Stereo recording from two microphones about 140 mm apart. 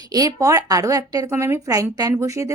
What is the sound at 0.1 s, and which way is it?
A woman's voice, 25° right (ahead or behind).